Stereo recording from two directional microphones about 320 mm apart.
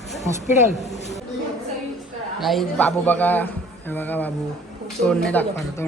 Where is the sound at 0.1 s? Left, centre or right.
Centre.